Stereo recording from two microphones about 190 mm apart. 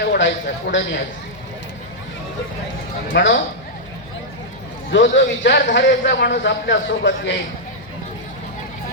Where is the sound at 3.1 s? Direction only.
70° left (ahead or behind).